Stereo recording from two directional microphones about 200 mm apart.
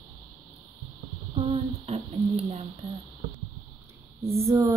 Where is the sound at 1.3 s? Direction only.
30° right (ahead or behind).